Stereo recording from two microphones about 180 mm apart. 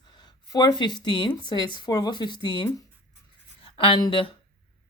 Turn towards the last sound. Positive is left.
turn(degrees=25)  # may be behind; listen again after turning